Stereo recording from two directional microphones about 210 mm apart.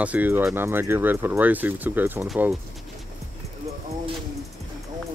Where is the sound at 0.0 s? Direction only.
5° right (ahead or behind).